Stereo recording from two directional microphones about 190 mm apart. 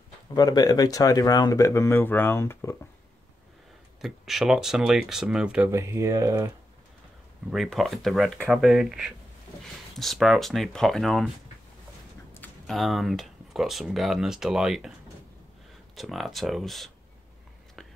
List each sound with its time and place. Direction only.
0.3 s speech: 20° left (ahead or behind)
4.0 s speech: centre (ahead or behind)
7.5 s speech: centre (ahead or behind)
12.4 s speech: centre (ahead or behind)
17.8 s whispering: centre (ahead or behind)